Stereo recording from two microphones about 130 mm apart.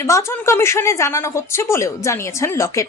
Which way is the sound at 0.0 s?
20° left (ahead or behind).